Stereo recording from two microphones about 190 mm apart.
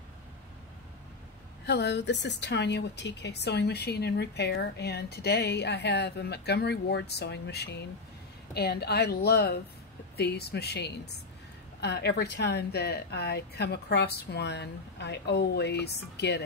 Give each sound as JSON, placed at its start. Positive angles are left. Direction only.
{"t": 1.7, "sound": "a woman's voice", "side_deg": 65}